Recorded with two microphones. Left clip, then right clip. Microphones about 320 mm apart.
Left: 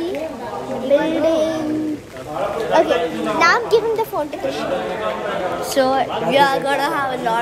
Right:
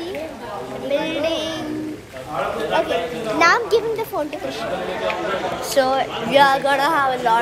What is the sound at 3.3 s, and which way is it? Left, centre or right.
Speech, centre.